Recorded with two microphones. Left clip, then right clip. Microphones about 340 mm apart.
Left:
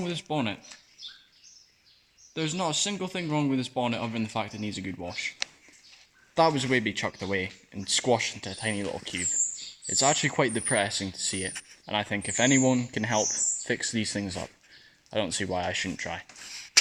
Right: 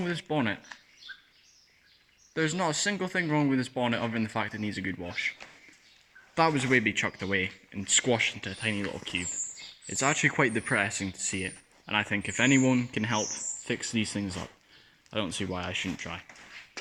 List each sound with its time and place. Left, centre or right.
0.0 s speech: centre
2.3 s speech: centre
6.3 s speech: centre
9.8 s speech: centre